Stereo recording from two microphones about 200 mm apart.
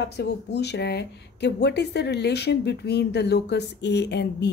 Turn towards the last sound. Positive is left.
turn(degrees=60)  # may be behind; listen again after turning